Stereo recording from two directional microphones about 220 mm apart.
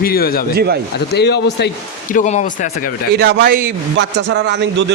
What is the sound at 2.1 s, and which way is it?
Speech, 35° left (ahead or behind).